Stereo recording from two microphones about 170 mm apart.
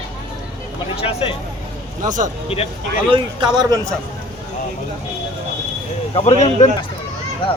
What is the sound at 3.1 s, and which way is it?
Speech, 25° right (ahead or behind).